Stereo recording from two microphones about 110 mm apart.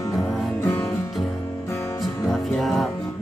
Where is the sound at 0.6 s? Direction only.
20° left (ahead or behind).